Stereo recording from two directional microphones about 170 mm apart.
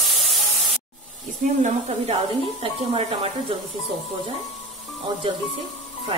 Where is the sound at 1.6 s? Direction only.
40° right (ahead or behind).